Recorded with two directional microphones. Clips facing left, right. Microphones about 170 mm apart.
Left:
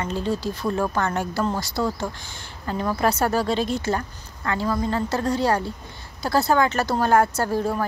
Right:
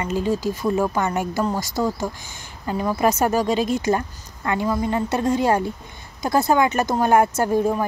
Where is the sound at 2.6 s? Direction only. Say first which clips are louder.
Right 2 dB; 10° right (ahead or behind).